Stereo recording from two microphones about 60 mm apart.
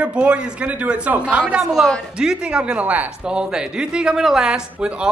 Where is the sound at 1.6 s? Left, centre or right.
Centre; by 3.1 s right.